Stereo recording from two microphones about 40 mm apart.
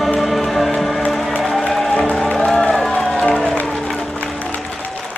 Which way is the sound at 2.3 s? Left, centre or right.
Centre.